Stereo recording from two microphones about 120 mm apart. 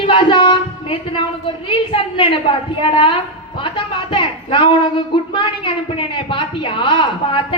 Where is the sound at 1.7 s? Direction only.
45° left (ahead or behind).